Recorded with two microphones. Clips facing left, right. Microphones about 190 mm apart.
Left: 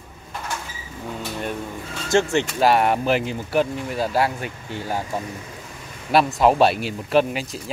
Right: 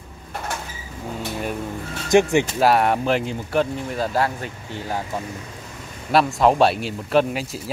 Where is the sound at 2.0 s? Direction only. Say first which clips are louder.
Right 3 dB; 15° right (ahead or behind).